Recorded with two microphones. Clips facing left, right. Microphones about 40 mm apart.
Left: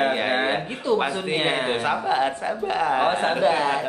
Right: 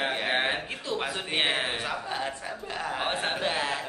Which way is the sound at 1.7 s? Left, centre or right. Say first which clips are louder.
Left 9 dB; left.